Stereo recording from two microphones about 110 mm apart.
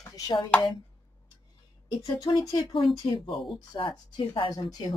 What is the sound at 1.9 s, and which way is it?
A woman's voice, 40° left (ahead or behind).